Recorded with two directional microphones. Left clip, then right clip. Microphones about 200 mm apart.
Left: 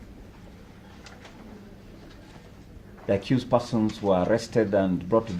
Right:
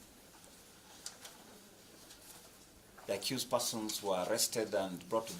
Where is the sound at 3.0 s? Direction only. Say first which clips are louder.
Left 12 dB; 30° right (ahead or behind).